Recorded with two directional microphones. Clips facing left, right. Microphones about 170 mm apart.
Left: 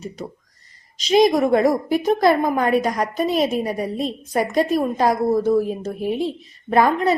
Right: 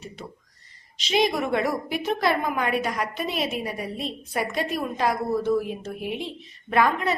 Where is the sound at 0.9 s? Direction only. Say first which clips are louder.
Left 8 dB; 40° left (ahead or behind).